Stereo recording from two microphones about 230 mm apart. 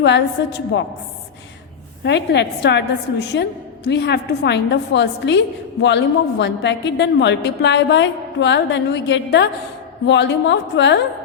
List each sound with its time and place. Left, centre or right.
0.4 s a woman's voice: left
2.0 s a woman's voice: left